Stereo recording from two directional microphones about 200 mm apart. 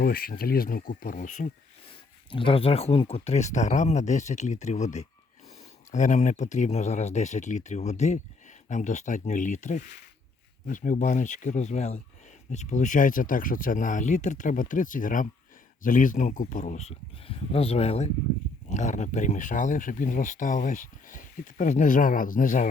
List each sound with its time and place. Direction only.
0.0 s speech: 50° left (ahead or behind)
2.3 s speech: 25° left (ahead or behind)
17.2 s speech: 30° left (ahead or behind)